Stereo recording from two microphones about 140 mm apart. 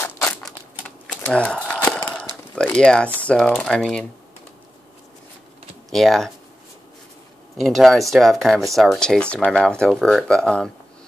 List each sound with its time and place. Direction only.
0.0 s a sound: 15° left (ahead or behind)
0.8 s crumpling: 10° left (ahead or behind)
2.1 s a sound: 10° left (ahead or behind)
3.3 s speech: 10° left (ahead or behind)
5.9 s speech: centre (ahead or behind)
7.6 s speech: centre (ahead or behind)